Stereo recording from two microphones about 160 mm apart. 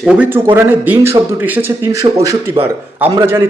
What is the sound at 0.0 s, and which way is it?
A man's voice, 5° right (ahead or behind).